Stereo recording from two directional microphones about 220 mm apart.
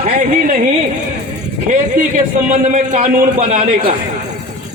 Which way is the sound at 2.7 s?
35° right (ahead or behind).